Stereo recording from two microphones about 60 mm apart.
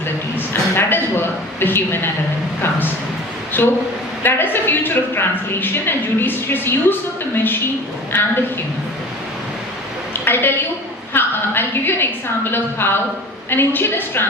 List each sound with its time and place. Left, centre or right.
0.3 s a sound: left
2.6 s a woman's voice: left
8.1 s a woman's voice: left
10.2 s a woman's voice: left